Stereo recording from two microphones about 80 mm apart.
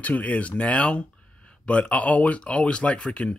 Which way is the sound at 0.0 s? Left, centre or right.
Centre.